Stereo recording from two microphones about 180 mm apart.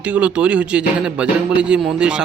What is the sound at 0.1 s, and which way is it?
A man's voice, 5° right (ahead or behind).